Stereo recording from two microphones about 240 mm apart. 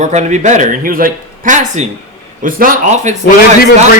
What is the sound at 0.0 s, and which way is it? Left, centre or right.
Speech, right.